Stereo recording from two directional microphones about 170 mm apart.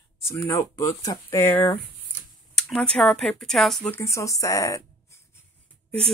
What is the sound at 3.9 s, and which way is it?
Speech, 15° left (ahead or behind).